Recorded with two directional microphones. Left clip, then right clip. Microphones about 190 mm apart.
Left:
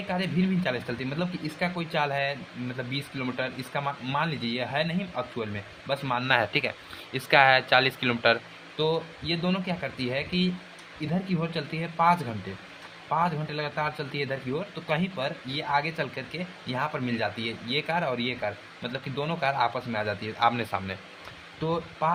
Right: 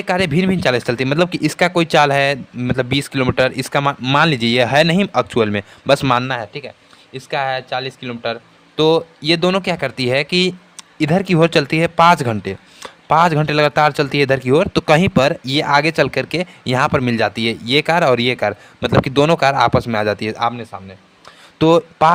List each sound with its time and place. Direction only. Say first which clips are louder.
0.1 s a man's voice: right 13 dB; 55° right (ahead or behind)
6.2 s speech: right 1 dB; 30° right (ahead or behind)
8.7 s a man's voice: right 13 dB; 55° right (ahead or behind)
20.5 s speech: right 1 dB; 20° right (ahead or behind)
21.6 s a man's voice: right 16 dB; 60° right (ahead or behind)